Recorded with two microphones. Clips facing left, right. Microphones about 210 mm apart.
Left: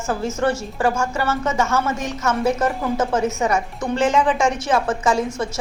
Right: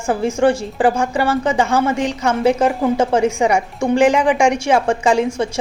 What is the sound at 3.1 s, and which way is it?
A woman's voice, 15° right (ahead or behind).